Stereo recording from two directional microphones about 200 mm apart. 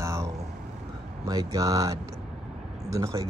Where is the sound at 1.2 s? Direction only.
15° right (ahead or behind).